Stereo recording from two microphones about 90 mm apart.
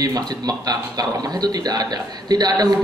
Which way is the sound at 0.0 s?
45° right (ahead or behind).